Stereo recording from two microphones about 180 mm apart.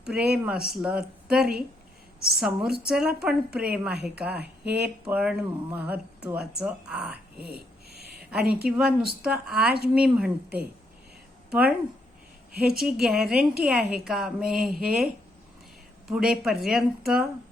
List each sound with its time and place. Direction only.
0.0 s a woman's voice: 5° right (ahead or behind)
7.3 s a sound: 60° right (ahead or behind)
8.3 s a woman's voice: 5° right (ahead or behind)
12.7 s a woman's voice: centre (ahead or behind)